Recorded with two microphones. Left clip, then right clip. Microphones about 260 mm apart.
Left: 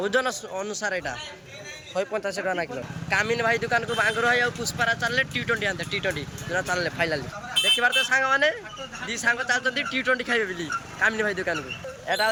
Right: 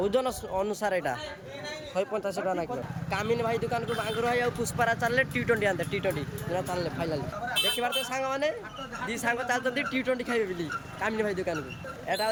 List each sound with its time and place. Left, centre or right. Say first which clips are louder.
0.0 s speech: left 3 dB; centre